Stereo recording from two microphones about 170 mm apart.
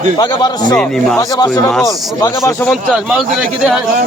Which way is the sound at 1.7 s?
Centre (ahead or behind).